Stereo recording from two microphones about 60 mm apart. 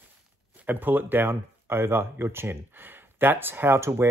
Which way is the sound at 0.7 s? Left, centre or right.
Right.